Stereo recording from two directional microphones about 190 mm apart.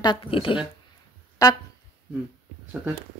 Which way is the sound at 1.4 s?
20° left (ahead or behind).